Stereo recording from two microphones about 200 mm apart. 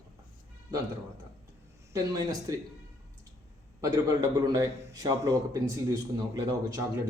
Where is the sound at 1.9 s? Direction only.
15° right (ahead or behind).